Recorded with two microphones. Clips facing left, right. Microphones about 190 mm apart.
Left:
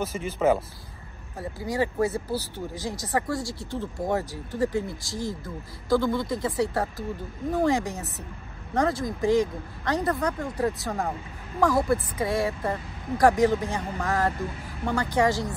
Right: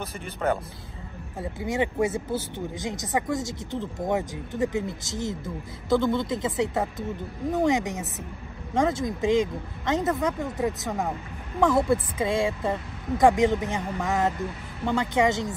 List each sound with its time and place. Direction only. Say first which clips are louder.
0.0 s speech: left 4 dB; centre (ahead or behind)
1.4 s speech: even; 20° right (ahead or behind)